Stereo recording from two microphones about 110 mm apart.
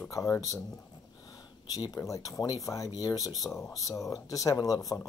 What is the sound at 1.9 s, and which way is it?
Speech, 30° left (ahead or behind).